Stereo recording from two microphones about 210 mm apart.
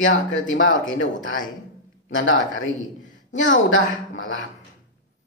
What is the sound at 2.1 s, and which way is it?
Speech, 65° left (ahead or behind).